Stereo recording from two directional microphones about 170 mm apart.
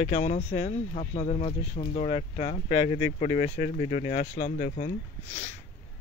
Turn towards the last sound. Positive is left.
turn(degrees=45)  # may be behind; listen again after turning